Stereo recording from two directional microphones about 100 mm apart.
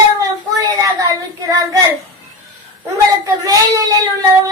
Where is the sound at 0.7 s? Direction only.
35° right (ahead or behind).